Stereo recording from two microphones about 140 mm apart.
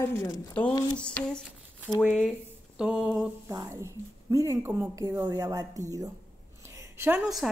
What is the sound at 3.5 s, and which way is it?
A woman's voice, 20° right (ahead or behind).